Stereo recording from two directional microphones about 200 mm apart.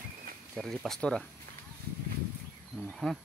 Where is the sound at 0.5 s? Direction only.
Centre (ahead or behind).